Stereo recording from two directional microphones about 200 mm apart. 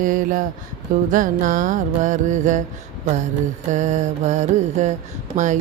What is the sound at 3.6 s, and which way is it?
Music, 35° right (ahead or behind).